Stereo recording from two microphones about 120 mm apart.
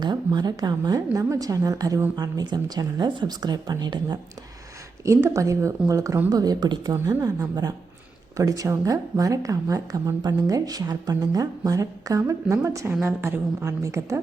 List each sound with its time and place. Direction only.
0.0 s a woman's voice: 35° right (ahead or behind)
5.0 s a woman's voice: 25° right (ahead or behind)